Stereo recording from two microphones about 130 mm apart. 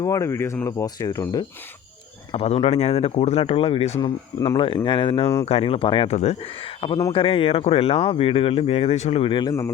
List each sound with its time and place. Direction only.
0.0 s speech: 25° left (ahead or behind)
2.3 s speech: 50° left (ahead or behind)
4.0 s speech: 30° left (ahead or behind); by 9.3 s 55° left (ahead or behind)
9.3 s speech: 35° left (ahead or behind)